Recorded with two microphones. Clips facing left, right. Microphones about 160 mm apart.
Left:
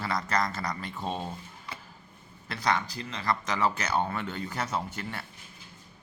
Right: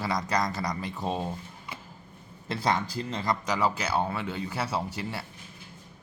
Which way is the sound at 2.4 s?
25° right (ahead or behind).